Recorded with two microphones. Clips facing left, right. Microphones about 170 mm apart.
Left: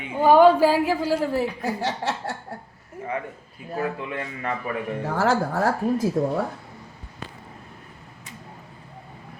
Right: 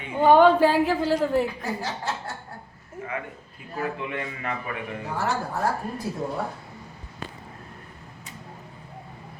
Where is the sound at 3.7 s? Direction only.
35° left (ahead or behind).